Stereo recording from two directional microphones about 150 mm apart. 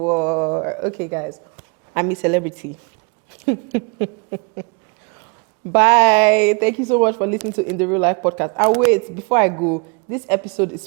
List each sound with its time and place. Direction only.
0.0 s a sound: 20° right (ahead or behind)
1.9 s a woman's voice: 15° right (ahead or behind)
3.4 s owl: 15° right (ahead or behind)
5.7 s a woman's voice: 15° right (ahead or behind)